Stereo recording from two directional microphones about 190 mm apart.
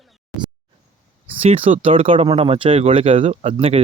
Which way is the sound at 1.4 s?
30° right (ahead or behind).